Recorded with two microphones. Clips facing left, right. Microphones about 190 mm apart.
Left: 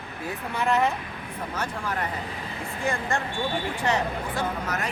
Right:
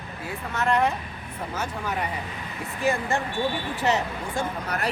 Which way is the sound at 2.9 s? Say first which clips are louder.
Right 3 dB; 15° right (ahead or behind).